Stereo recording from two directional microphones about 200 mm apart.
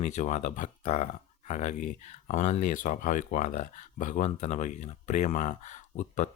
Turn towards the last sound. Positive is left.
turn(degrees=40)  # may be behind; listen again after turning